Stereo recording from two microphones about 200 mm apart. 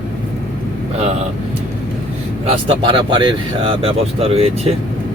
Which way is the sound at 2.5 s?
25° right (ahead or behind).